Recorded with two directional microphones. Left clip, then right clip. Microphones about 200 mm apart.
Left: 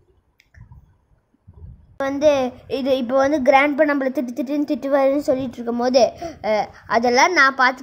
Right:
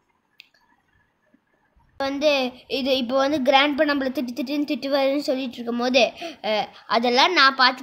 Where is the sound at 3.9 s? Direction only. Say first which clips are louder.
Left 3 dB; 15° left (ahead or behind).